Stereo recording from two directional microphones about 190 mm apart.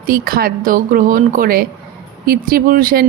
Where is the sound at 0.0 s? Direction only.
50° right (ahead or behind).